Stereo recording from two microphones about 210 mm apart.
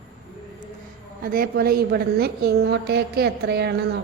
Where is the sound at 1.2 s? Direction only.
45° right (ahead or behind).